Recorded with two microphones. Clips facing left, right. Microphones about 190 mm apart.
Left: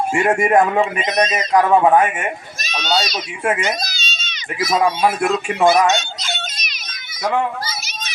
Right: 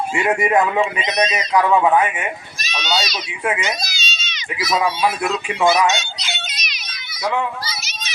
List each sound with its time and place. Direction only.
0.1 s a child's voice: 45° left (ahead or behind)